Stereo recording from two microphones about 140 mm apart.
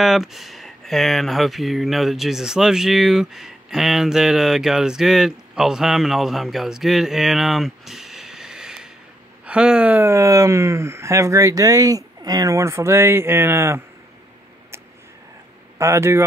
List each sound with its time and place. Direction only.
0.0 s speech: centre (ahead or behind); by 13.8 s 20° right (ahead or behind)
15.8 s speech: 20° right (ahead or behind)